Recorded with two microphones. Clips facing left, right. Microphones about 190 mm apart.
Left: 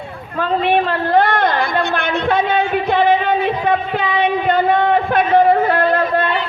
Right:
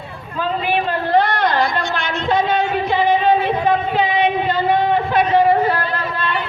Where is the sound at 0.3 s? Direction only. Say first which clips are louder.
Left 4 dB; 60° left (ahead or behind).